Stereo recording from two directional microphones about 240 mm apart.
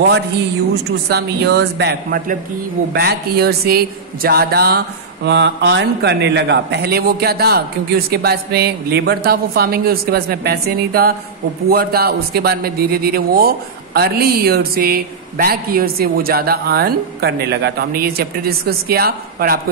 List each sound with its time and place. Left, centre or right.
1.1 s a man's voice: right